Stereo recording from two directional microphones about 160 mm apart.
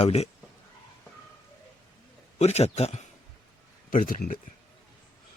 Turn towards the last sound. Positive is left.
turn(degrees=60)  # may be behind; listen again after turning